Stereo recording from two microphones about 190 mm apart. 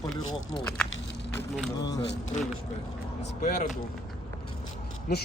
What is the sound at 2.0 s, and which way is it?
Speech, 65° left (ahead or behind).